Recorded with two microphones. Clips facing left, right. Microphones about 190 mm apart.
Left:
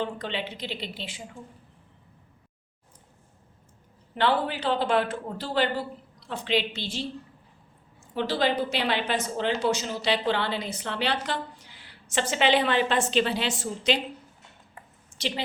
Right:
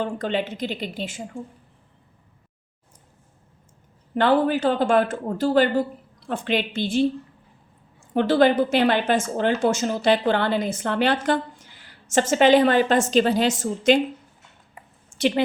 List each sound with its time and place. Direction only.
0.0 s a woman's voice: 45° right (ahead or behind)
4.1 s a woman's voice: 45° right (ahead or behind)
8.1 s a woman's voice: 55° right (ahead or behind)
15.1 s speech: 55° right (ahead or behind)